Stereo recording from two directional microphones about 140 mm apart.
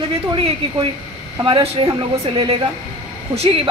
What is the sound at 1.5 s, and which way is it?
A woman's voice, 40° right (ahead or behind).